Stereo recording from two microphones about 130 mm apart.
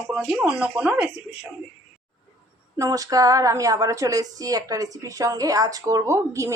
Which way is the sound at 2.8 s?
25° right (ahead or behind).